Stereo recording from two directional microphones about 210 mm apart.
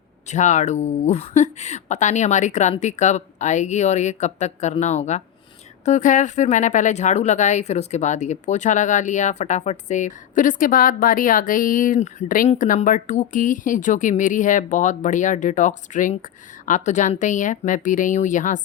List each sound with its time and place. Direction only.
0.3 s speech: 35° left (ahead or behind)